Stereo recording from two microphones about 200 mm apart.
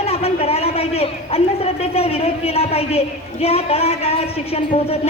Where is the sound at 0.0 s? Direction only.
30° left (ahead or behind).